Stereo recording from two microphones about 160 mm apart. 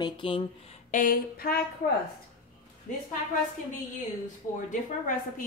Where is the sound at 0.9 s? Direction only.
65° left (ahead or behind).